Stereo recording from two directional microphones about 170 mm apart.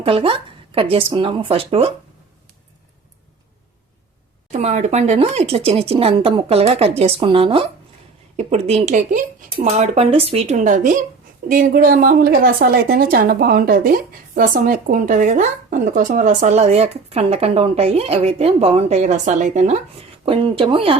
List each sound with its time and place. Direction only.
0.0 s speech: 30° right (ahead or behind)
4.5 s a woman's voice: 45° right (ahead or behind)
20.2 s speech: 35° right (ahead or behind)